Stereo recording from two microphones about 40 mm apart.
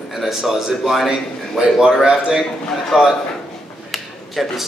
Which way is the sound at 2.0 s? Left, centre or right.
Centre.